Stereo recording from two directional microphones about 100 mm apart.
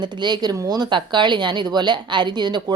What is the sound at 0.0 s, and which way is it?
Speech, 50° right (ahead or behind).